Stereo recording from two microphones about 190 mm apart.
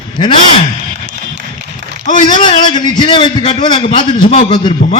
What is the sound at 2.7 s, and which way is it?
A man's voice, 25° left (ahead or behind).